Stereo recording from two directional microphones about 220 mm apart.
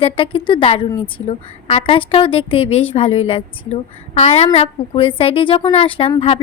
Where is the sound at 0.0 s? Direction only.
25° left (ahead or behind).